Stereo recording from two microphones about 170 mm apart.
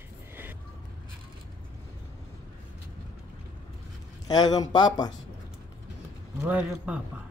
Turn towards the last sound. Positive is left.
turn(degrees=-10)  # may be behind; listen again after turning